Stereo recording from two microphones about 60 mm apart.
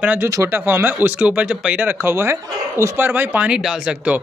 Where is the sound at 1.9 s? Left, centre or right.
Right.